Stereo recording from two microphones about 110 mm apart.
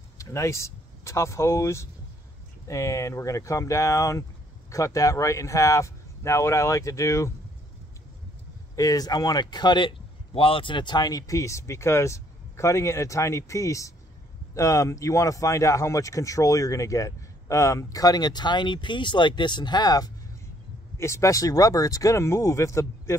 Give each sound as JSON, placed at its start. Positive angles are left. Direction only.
{"t": 0.2, "sound": "speech", "side_deg": 30}
{"t": 8.7, "sound": "speech", "side_deg": 35}
{"t": 21.0, "sound": "speech", "side_deg": 25}